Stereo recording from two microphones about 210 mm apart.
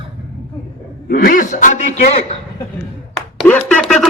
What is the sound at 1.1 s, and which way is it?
A man's voice, 45° left (ahead or behind).